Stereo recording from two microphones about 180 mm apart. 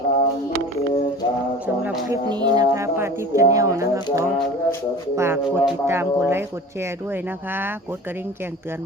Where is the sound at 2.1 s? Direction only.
25° right (ahead or behind).